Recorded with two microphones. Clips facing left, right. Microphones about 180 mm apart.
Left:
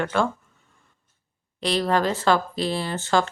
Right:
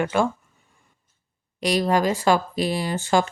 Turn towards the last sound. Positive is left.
turn(degrees=-15)  # may be behind; listen again after turning